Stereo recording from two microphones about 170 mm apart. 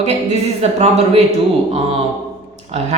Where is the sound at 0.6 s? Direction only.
40° right (ahead or behind).